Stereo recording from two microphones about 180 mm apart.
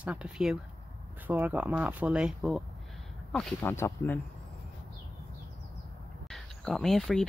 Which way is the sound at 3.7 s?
15° left (ahead or behind).